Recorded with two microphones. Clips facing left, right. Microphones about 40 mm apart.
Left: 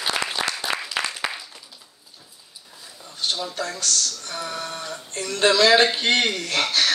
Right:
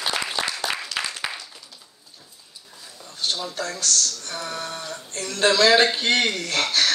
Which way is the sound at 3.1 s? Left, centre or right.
Centre.